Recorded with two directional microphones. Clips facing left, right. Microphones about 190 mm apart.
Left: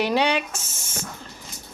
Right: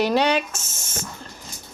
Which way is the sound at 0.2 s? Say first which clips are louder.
Right 2 dB; 45° right (ahead or behind).